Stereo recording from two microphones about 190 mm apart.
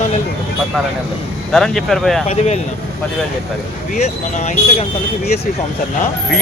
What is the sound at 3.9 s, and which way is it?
Speech, 35° left (ahead or behind).